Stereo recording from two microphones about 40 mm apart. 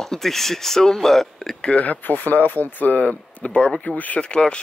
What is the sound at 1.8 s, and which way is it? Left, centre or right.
Speech, left.